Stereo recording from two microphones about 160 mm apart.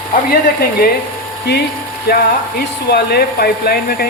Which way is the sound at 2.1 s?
75° left (ahead or behind).